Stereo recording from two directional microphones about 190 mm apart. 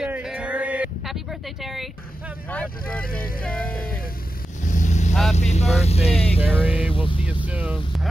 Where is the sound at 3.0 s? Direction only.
50° left (ahead or behind).